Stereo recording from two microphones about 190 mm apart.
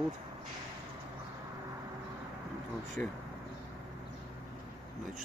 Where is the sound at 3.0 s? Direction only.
10° left (ahead or behind).